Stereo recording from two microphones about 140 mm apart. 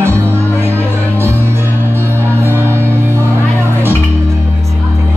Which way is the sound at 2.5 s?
20° right (ahead or behind).